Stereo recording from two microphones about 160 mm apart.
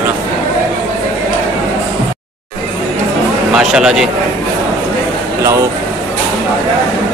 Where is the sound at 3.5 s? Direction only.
5° right (ahead or behind).